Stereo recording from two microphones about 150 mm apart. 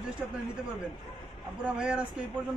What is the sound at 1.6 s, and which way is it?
Speech, 10° right (ahead or behind).